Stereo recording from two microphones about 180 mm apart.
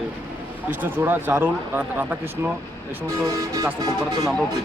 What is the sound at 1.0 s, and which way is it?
Speech, 10° right (ahead or behind).